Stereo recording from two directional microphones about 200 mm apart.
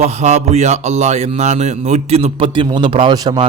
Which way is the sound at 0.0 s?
35° right (ahead or behind).